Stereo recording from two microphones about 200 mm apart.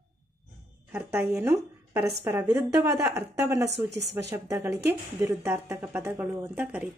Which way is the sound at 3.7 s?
60° right (ahead or behind).